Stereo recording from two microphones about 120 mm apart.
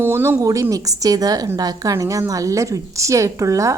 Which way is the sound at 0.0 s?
20° right (ahead or behind).